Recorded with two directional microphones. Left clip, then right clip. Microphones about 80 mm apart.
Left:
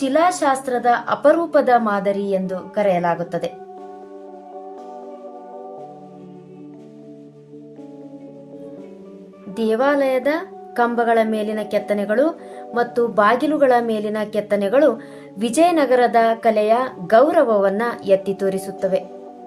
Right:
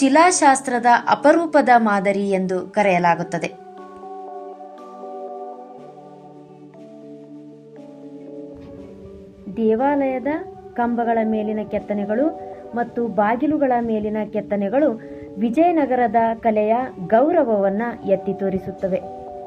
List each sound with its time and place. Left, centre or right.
0.0 s a woman's voice: right
9.6 s a woman's voice: centre